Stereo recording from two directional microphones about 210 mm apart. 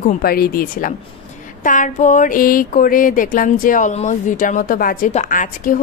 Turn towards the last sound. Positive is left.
turn(degrees=40)  # may be behind; listen again after turning